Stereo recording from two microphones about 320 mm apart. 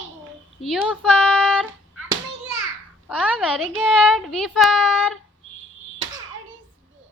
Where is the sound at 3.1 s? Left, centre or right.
Centre.